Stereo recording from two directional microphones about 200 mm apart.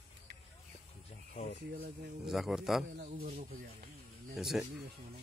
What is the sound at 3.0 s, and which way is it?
Speech, 40° right (ahead or behind).